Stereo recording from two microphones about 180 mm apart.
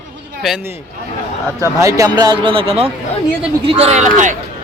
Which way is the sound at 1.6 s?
15° right (ahead or behind).